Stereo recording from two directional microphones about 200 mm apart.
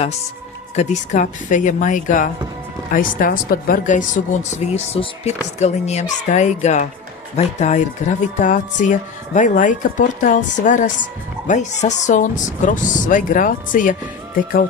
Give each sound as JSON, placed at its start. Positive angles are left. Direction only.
{"t": 0.7, "sound": "speech", "side_deg": 35}